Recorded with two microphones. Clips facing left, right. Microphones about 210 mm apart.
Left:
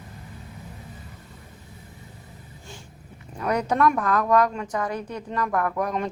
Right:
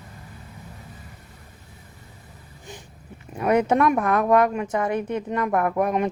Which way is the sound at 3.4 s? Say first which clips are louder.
Right 4 dB; 25° right (ahead or behind).